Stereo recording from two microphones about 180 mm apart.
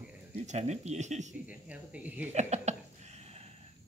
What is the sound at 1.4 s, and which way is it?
Speech, 10° right (ahead or behind).